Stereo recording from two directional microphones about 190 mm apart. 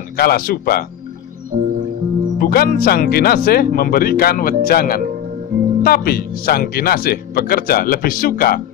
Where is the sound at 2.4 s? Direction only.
50° left (ahead or behind).